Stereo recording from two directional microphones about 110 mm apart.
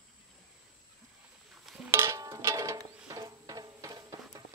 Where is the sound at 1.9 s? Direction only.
25° right (ahead or behind).